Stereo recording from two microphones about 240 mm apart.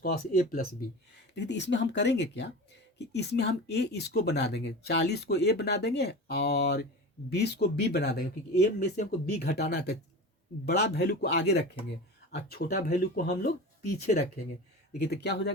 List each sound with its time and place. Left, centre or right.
0.0 s speech: left
1.4 s speech: left